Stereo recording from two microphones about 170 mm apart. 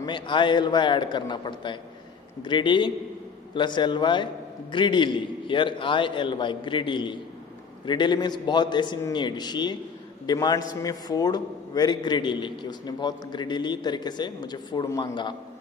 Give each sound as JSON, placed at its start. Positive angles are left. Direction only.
{"t": 0.0, "sound": "a man's voice", "side_deg": 30}